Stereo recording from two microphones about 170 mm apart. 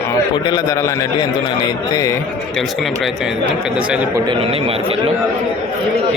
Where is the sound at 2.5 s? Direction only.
Centre (ahead or behind).